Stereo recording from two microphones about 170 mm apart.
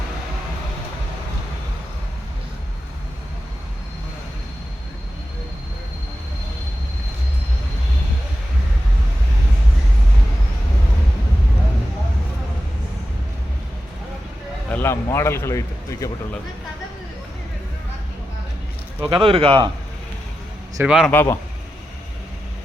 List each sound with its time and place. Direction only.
14.7 s speech: 15° left (ahead or behind)
18.9 s speech: 10° right (ahead or behind)
19.2 s a man's voice: 30° right (ahead or behind)
20.8 s a man's voice: 5° right (ahead or behind)
21.1 s a man's voice: 15° left (ahead or behind)